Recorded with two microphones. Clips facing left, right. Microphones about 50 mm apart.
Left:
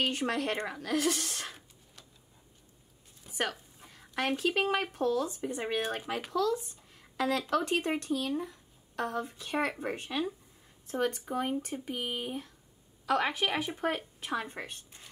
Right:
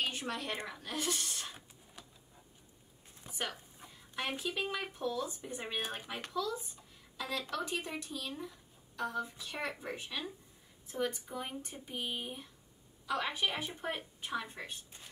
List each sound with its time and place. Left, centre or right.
0.0 s speech: left
2.0 s a sound: centre
3.3 s speech: left
13.0 s a woman's voice: left